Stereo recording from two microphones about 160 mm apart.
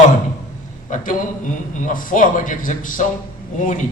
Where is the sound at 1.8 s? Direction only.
60° left (ahead or behind).